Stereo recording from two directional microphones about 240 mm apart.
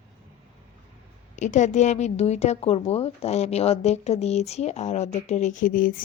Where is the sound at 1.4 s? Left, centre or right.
Left.